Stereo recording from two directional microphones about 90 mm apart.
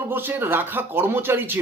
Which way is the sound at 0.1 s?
25° right (ahead or behind).